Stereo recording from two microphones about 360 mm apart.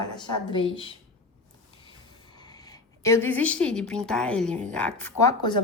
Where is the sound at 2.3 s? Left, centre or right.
Centre.